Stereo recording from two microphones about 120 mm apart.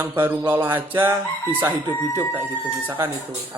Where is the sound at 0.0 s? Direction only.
20° right (ahead or behind).